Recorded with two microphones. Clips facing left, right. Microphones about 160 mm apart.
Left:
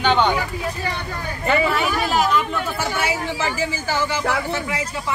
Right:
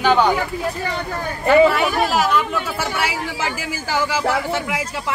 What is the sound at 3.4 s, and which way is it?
Speech, 10° right (ahead or behind).